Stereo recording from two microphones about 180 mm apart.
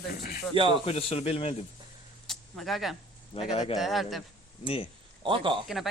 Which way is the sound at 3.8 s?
Centre (ahead or behind).